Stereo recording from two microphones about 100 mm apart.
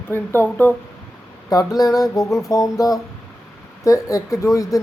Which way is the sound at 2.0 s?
Centre (ahead or behind).